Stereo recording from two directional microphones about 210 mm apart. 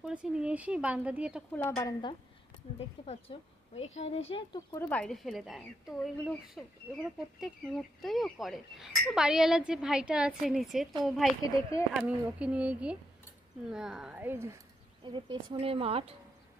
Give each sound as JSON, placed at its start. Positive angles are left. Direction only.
{"t": 0.0, "sound": "speech", "side_deg": -5}
{"t": 1.5, "sound": "speech", "side_deg": 10}
{"t": 3.1, "sound": "speech", "side_deg": 25}
{"t": 4.8, "sound": "speech", "side_deg": 5}
{"t": 15.0, "sound": "speech", "side_deg": -20}